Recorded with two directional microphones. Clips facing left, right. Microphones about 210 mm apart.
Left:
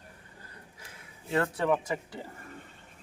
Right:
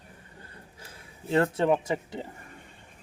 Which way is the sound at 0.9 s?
25° right (ahead or behind).